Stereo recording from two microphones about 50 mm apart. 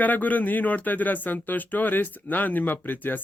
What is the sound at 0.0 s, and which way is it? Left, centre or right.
Speech, left.